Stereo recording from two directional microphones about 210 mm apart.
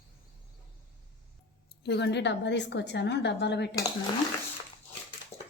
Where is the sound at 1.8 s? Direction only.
55° left (ahead or behind).